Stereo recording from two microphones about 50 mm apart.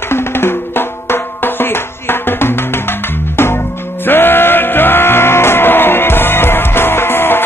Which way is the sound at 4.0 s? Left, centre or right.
Left.